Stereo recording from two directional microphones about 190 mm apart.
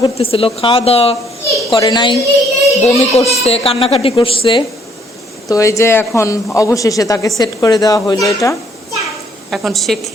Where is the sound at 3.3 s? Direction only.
35° left (ahead or behind).